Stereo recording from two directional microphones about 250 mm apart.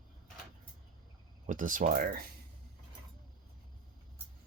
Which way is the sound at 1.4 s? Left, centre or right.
Right.